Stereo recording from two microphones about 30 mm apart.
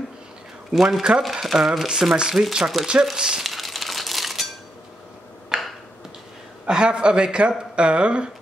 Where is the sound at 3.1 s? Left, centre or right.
Right.